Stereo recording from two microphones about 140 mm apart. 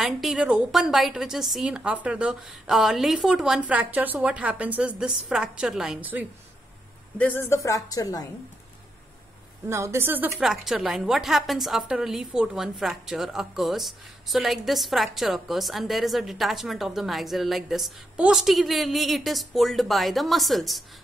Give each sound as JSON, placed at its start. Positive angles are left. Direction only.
{"t": 0.0, "sound": "a woman's voice", "side_deg": 0}
{"t": 7.2, "sound": "a woman's voice", "side_deg": 15}
{"t": 9.7, "sound": "speech", "side_deg": -20}
{"t": 10.4, "sound": "a woman's voice", "side_deg": 0}